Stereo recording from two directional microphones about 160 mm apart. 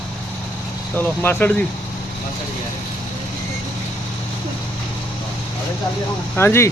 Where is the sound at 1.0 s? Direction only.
10° left (ahead or behind).